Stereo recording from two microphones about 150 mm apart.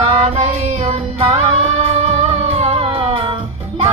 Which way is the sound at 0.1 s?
40° right (ahead or behind).